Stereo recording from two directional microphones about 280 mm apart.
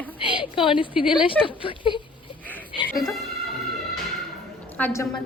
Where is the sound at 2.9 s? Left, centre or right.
Centre.